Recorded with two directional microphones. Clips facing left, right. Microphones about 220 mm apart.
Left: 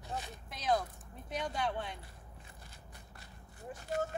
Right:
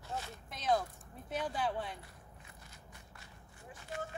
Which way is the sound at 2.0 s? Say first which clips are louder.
Left 1 dB; 30° left (ahead or behind).